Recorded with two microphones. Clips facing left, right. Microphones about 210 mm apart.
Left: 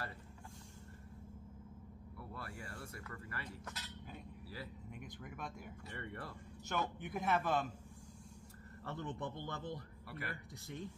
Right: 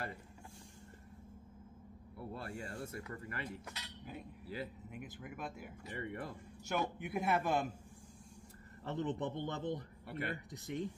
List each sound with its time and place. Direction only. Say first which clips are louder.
2.1 s a man's voice: right 5 dB; 25° right (ahead or behind)
4.9 s speech: right 2 dB; 5° right (ahead or behind)
5.9 s a man's voice: right 6 dB; 20° right (ahead or behind)
8.8 s a man's voice: right 6 dB; 20° right (ahead or behind)